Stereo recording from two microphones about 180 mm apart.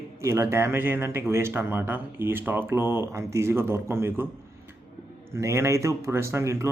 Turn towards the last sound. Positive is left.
turn(degrees=-15)  # may be behind; listen again after turning